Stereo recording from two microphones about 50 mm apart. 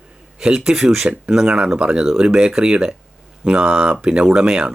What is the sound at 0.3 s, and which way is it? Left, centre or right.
Speech, centre.